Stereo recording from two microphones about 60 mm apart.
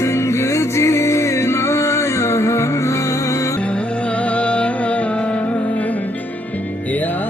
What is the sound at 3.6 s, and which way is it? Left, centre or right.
Music, centre.